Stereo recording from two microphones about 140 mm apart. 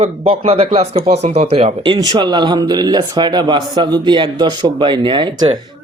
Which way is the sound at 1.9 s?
30° right (ahead or behind).